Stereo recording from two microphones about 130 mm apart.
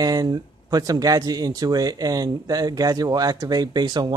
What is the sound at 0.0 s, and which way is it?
Speech, 30° right (ahead or behind).